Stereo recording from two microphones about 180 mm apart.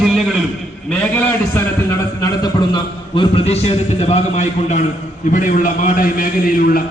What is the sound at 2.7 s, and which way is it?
A man's voice, 30° left (ahead or behind).